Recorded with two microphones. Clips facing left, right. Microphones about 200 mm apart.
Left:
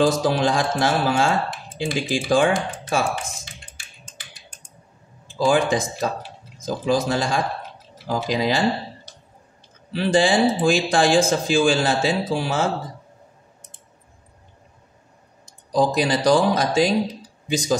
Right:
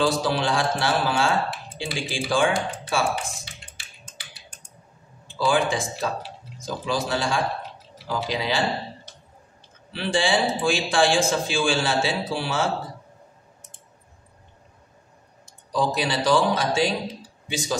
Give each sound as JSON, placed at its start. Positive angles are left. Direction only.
{"t": 0.0, "sound": "speech", "side_deg": 45}
{"t": 5.3, "sound": "speech", "side_deg": 45}
{"t": 15.7, "sound": "speech", "side_deg": 40}